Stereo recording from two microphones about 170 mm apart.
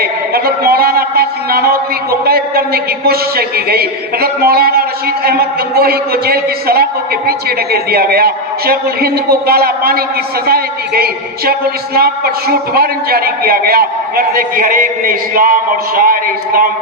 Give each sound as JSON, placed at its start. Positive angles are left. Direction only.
{"t": 0.0, "sound": "a man's voice", "side_deg": -65}